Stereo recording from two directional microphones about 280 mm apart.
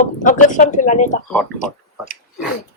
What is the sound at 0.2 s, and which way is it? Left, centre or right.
Speech, left.